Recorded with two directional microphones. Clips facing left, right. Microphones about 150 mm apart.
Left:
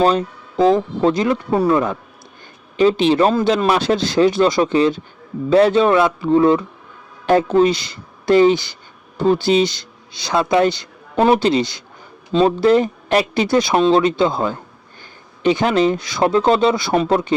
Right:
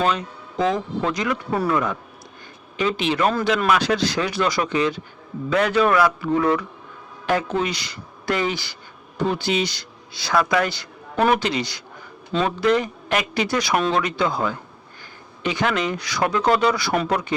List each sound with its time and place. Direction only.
0.0 s speech: 35° left (ahead or behind)